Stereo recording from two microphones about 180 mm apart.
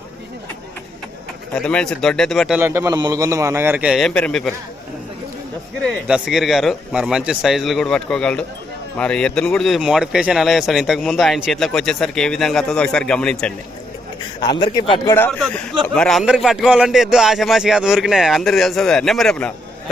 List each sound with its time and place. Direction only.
1.5 s speech: 5° left (ahead or behind)
2.6 s a man's voice: 15° right (ahead or behind); by 4.5 s 5° left (ahead or behind)
5.8 s speech: 5° right (ahead or behind)
14.4 s a man's voice: 25° left (ahead or behind)
15.1 s speech: 10° left (ahead or behind)